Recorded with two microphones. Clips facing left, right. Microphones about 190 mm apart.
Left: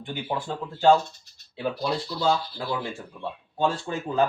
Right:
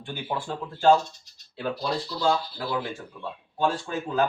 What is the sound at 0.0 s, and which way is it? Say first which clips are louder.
Speech: left 1 dB; 15° left (ahead or behind).